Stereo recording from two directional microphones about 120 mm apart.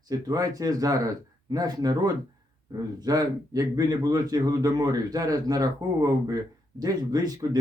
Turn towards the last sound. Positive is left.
turn(degrees=-30)  # may be behind; listen again after turning